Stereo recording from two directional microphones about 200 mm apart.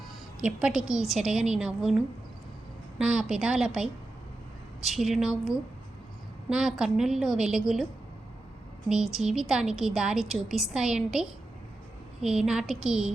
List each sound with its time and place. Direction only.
0.3 s a woman's voice: 5° right (ahead or behind)
3.0 s a woman's voice: 5° right (ahead or behind)
8.9 s a woman's voice: 5° right (ahead or behind)